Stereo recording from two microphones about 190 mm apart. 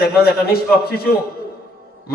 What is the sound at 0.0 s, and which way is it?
A man's voice, 55° left (ahead or behind).